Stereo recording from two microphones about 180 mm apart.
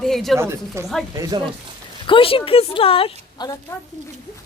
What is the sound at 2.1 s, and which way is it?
A woman's voice, 30° left (ahead or behind).